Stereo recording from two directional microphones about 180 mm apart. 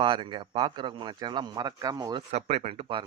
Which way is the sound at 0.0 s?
30° right (ahead or behind).